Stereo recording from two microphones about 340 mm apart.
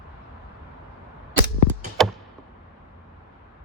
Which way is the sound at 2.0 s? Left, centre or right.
Centre.